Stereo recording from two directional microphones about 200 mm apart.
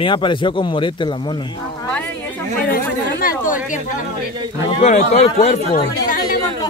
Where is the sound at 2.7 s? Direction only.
45° left (ahead or behind).